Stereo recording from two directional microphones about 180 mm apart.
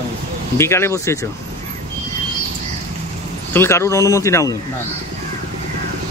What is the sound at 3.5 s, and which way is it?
A man's voice, 15° left (ahead or behind).